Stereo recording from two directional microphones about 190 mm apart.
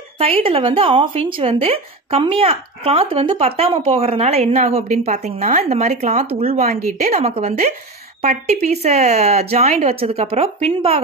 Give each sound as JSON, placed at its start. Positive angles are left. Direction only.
{"t": 0.2, "sound": "a woman's voice", "side_deg": -30}